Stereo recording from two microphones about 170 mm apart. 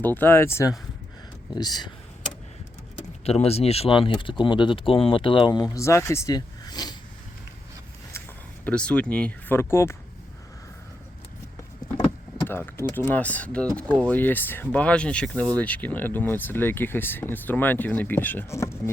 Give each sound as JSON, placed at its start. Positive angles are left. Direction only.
{"t": 0.0, "sound": "speech", "side_deg": 10}
{"t": 3.2, "sound": "speech", "side_deg": 35}
{"t": 8.1, "sound": "a sound", "side_deg": 15}
{"t": 8.6, "sound": "speech", "side_deg": 5}
{"t": 12.5, "sound": "speech", "side_deg": 15}